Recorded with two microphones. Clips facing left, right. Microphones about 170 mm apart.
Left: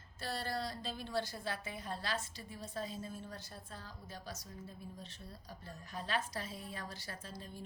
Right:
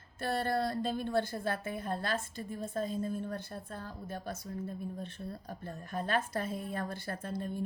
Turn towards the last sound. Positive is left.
turn(degrees=-55)  # may be behind; listen again after turning